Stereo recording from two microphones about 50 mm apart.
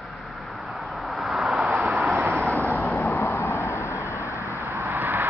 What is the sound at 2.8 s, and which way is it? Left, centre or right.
Vehicle, left.